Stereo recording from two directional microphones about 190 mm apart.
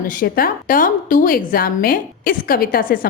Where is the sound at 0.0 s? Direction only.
45° left (ahead or behind).